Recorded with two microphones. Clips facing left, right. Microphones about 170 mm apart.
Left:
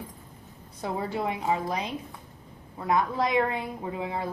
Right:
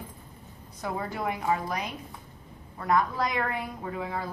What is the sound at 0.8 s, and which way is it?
A woman's voice, 25° left (ahead or behind).